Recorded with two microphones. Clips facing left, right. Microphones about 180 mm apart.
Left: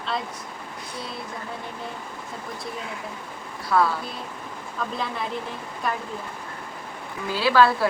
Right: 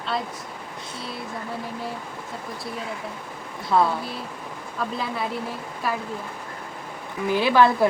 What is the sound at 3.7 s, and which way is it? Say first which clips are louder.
Speech: right 1 dB; 25° right (ahead or behind).